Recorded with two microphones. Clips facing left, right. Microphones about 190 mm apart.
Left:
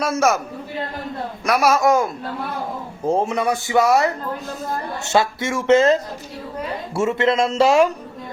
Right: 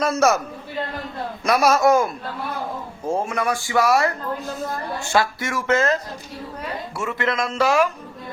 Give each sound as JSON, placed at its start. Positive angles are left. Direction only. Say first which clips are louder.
{"t": 0.0, "sound": "a man's voice", "louder": "even", "side_deg": 10}
{"t": 1.5, "sound": "a man's voice", "louder": "even", "side_deg": 0}
{"t": 1.7, "sound": "a man's voice", "louder": "right 1 dB", "side_deg": 15}
{"t": 3.1, "sound": "speech", "louder": "left 3 dB", "side_deg": 20}